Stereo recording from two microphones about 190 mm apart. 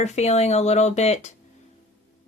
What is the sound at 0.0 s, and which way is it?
Speech, 35° left (ahead or behind).